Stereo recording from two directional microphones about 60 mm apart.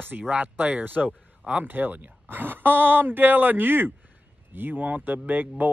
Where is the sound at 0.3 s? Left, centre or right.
Right.